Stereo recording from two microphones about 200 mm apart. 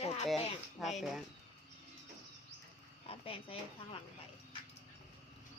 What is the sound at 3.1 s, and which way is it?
Speech, 25° left (ahead or behind).